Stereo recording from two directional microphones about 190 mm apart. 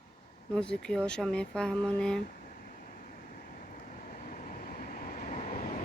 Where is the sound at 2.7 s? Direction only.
50° left (ahead or behind).